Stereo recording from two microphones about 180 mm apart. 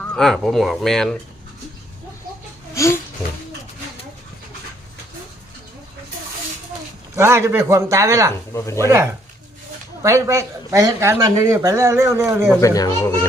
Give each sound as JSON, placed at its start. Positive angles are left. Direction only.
{"t": 0.0, "sound": "speech", "side_deg": 5}
{"t": 2.7, "sound": "speech", "side_deg": 15}
{"t": 7.2, "sound": "speech", "side_deg": -15}
{"t": 8.5, "sound": "a child's voice", "side_deg": 15}
{"t": 10.0, "sound": "speech", "side_deg": -15}
{"t": 12.5, "sound": "a child's voice", "side_deg": 15}